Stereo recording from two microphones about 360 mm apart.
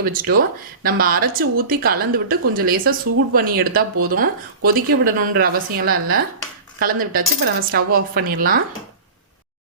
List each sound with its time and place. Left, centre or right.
0.0 s speech: right